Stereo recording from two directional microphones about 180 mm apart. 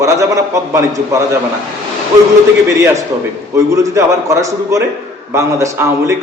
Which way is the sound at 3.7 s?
15° right (ahead or behind).